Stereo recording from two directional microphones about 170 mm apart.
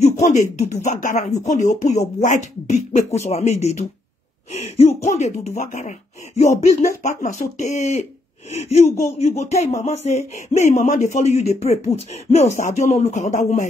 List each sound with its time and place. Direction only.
0.2 s speech: 45° left (ahead or behind)